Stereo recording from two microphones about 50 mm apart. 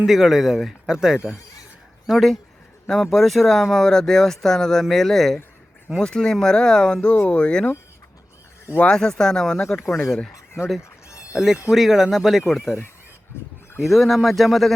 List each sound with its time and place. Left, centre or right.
0.1 s speech: centre
2.0 s speech: centre; by 7.7 s left
8.9 s speech: centre
11.3 s speech: centre
13.7 s speech: centre